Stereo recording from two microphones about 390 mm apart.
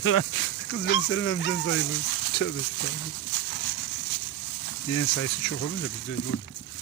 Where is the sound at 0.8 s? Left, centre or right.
Left.